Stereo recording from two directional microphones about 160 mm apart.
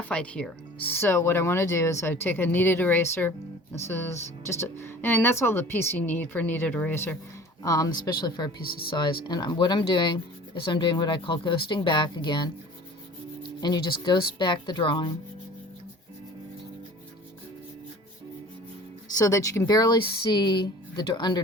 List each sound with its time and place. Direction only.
0.0 s speech: 5° left (ahead or behind); by 8.4 s 25° left (ahead or behind)
8.6 s speech: 70° left (ahead or behind)
9.2 s speech: 25° left (ahead or behind)
13.6 s speech: 25° left (ahead or behind)
19.1 s speech: 20° left (ahead or behind)